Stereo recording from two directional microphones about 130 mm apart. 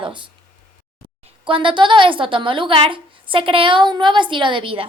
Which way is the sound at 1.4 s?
40° right (ahead or behind).